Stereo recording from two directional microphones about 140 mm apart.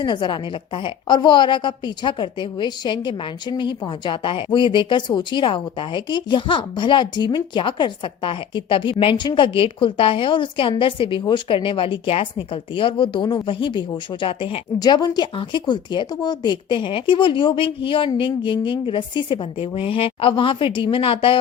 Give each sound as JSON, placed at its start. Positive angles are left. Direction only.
{"t": 0.0, "sound": "a woman's voice", "side_deg": 35}
{"t": 14.8, "sound": "a woman's voice", "side_deg": 30}